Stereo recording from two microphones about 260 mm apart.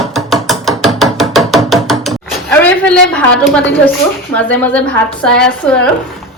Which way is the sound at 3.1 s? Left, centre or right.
Centre.